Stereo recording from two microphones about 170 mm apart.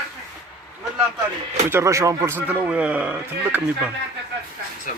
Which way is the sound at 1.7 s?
15° right (ahead or behind).